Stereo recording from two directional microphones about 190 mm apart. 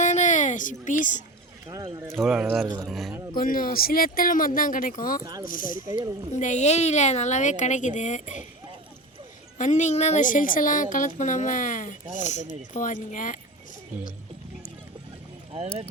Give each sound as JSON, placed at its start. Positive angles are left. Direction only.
{"t": 0.0, "sound": "a sound", "side_deg": 40}
{"t": 1.6, "sound": "speech", "side_deg": -20}
{"t": 2.0, "sound": "speech", "side_deg": 0}
{"t": 2.6, "sound": "speech", "side_deg": -20}
{"t": 2.9, "sound": "speech", "side_deg": 0}
{"t": 3.3, "sound": "a woman's voice", "side_deg": 50}
{"t": 5.2, "sound": "speech", "side_deg": -20}
{"t": 5.5, "sound": "a woman's voice", "side_deg": 45}
{"t": 9.6, "sound": "a woman's voice", "side_deg": 40}